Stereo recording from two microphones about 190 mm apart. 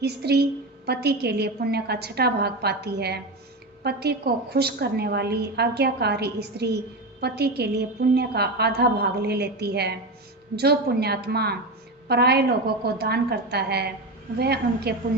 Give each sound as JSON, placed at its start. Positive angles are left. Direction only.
{"t": 0.0, "sound": "a woman's voice", "side_deg": -60}